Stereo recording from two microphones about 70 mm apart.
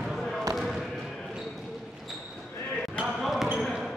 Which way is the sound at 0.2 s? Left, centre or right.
Centre.